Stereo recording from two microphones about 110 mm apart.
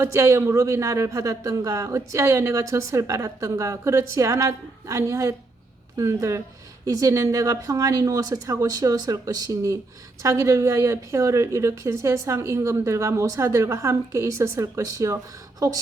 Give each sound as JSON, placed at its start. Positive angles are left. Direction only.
{"t": 0.0, "sound": "a woman's voice", "side_deg": -25}